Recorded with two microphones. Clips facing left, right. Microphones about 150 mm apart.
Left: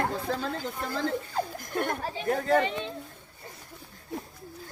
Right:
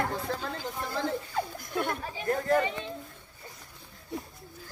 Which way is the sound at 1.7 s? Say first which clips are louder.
Left 2 dB; 55° left (ahead or behind).